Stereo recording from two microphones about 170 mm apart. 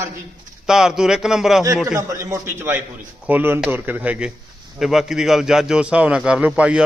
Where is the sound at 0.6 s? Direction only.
5° right (ahead or behind).